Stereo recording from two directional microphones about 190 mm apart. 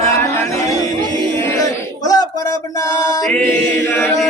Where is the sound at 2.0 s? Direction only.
20° left (ahead or behind).